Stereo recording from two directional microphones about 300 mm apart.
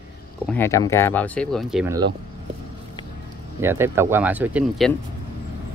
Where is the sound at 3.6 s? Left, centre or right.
Centre.